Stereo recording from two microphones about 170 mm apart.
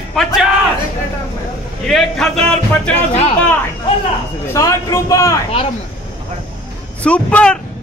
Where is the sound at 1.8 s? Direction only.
5° left (ahead or behind).